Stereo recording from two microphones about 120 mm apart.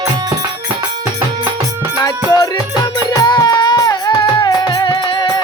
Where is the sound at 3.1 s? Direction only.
30° left (ahead or behind).